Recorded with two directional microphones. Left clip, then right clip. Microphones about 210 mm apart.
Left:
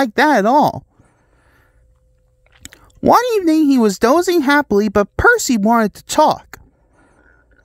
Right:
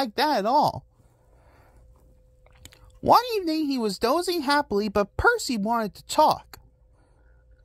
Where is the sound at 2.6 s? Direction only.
45° left (ahead or behind).